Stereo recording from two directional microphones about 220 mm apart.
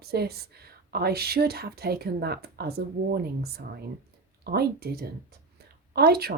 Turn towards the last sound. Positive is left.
turn(degrees=-45)  # may be behind; listen again after turning